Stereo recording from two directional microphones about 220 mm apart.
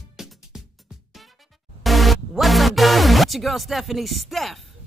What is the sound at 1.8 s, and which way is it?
Music, centre (ahead or behind).